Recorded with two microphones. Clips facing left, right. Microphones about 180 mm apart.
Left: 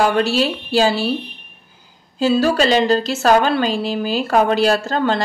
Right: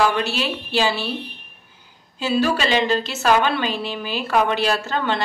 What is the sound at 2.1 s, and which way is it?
Speech, 40° left (ahead or behind).